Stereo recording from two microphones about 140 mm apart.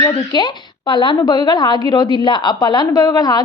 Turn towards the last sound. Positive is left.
turn(degrees=30)  # may be behind; listen again after turning